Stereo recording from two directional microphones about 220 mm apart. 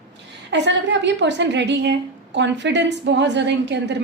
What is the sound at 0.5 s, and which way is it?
A woman's voice, 55° right (ahead or behind).